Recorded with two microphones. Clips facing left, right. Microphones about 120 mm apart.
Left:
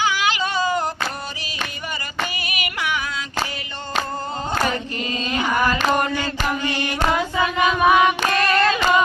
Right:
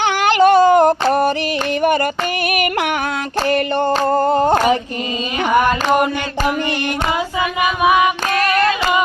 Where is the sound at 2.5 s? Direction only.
55° right (ahead or behind).